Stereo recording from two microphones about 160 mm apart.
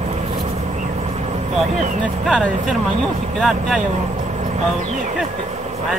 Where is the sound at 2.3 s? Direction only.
Centre (ahead or behind).